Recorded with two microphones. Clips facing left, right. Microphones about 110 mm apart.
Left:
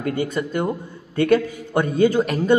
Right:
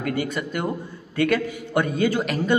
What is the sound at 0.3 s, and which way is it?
A man's voice, 30° left (ahead or behind).